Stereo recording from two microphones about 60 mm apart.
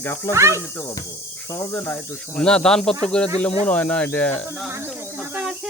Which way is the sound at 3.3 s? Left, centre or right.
Left.